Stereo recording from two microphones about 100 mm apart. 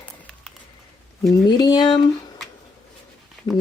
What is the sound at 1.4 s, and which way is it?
Speech, 45° left (ahead or behind).